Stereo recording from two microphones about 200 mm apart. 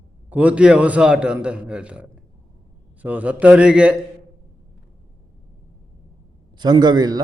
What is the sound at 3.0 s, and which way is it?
Speech, 5° right (ahead or behind).